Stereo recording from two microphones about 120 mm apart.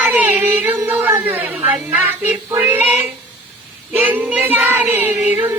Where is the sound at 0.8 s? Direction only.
20° right (ahead or behind).